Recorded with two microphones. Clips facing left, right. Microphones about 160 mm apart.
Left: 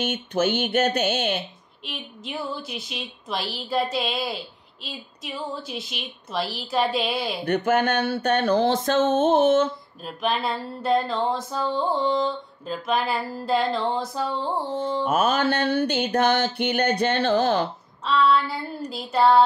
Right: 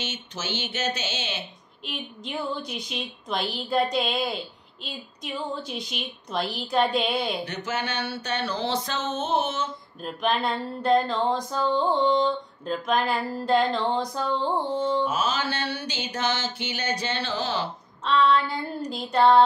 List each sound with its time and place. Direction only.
0.0 s mantra: 55° left (ahead or behind)
1.9 s music: 5° left (ahead or behind)
7.4 s a sound: 55° left (ahead or behind)
10.0 s music: centre (ahead or behind)
14.7 s carnatic music: 30° left (ahead or behind)
15.0 s mantra: 55° left (ahead or behind)
18.0 s music: 5° left (ahead or behind)